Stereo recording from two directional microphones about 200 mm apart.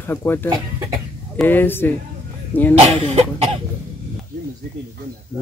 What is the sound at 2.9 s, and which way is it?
Speech, 30° right (ahead or behind).